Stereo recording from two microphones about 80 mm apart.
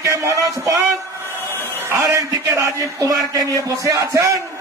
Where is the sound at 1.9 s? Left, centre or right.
Right.